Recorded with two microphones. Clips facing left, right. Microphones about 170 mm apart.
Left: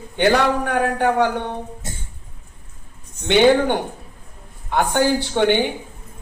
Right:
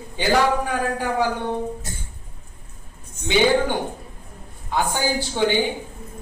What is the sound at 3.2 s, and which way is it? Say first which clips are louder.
A woman's voice: left 4 dB; 65° left (ahead or behind).